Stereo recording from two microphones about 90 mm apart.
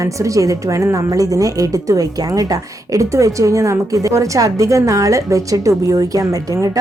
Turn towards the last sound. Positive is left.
turn(degrees=-40)  # may be behind; listen again after turning